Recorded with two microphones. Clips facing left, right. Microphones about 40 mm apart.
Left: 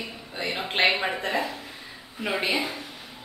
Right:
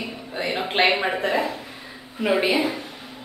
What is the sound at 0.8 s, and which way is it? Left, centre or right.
Speech, centre.